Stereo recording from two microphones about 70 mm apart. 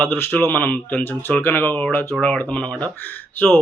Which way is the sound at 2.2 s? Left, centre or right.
Centre.